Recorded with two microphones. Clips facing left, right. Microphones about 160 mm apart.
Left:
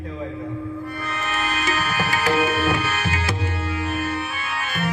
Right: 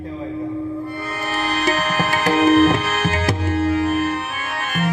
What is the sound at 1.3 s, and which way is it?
Tabla, 35° right (ahead or behind).